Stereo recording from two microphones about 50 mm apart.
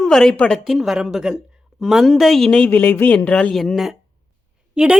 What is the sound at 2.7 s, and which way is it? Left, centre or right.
Speech, left.